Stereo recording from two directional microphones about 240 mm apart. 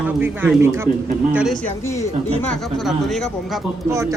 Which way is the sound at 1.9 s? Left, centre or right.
Centre.